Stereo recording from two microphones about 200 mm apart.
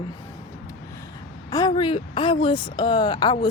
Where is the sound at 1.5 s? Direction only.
20° left (ahead or behind).